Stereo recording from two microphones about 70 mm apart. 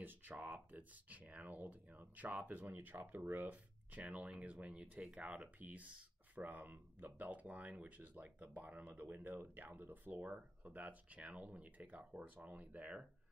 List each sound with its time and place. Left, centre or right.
0.0 s speech: right